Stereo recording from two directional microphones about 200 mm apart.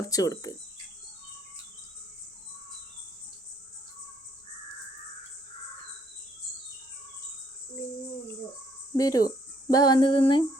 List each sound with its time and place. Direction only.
0.1 s speech: 15° left (ahead or behind)
9.0 s speech: 20° left (ahead or behind)